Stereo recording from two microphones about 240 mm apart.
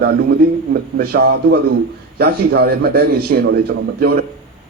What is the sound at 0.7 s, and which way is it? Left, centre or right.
Speech, right.